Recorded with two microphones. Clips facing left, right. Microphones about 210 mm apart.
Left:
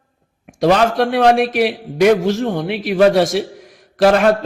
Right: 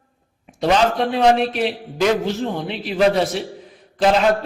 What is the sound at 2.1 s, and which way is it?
A man's voice, 90° left.